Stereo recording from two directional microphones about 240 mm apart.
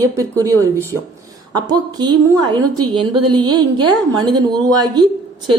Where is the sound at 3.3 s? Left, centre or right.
Centre.